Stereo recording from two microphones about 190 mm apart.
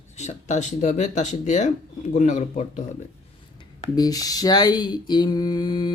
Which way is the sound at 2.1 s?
40° left (ahead or behind).